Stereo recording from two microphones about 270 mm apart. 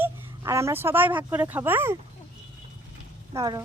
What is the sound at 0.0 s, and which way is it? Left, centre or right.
Speech, centre.